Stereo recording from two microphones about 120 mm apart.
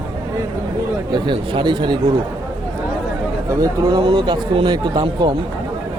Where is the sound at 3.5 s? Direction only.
30° right (ahead or behind).